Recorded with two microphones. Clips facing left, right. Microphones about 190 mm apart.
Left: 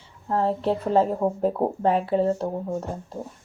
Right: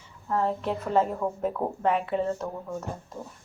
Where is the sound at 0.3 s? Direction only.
35° left (ahead or behind).